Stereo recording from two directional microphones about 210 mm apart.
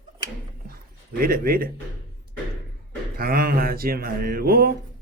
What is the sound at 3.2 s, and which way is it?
Speech, 45° right (ahead or behind).